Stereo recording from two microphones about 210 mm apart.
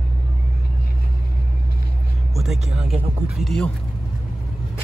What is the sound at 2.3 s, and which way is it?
Speech, centre (ahead or behind).